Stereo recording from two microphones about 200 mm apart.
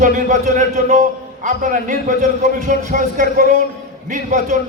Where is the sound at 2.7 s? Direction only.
45° right (ahead or behind).